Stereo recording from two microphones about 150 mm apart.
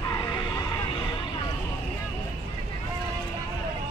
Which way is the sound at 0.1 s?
25° left (ahead or behind).